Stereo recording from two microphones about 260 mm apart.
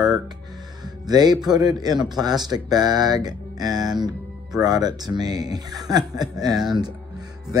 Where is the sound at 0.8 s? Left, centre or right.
Centre.